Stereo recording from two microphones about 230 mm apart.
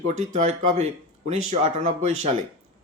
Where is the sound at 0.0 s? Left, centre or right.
Right.